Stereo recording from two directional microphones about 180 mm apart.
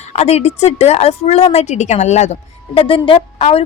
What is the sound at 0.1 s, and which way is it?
Speech, 35° left (ahead or behind).